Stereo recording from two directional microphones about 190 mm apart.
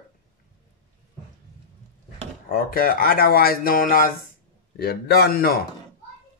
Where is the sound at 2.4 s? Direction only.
50° left (ahead or behind).